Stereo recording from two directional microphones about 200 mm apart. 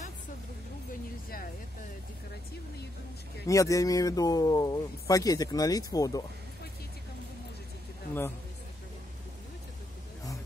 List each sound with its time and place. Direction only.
3.4 s speech: 15° left (ahead or behind)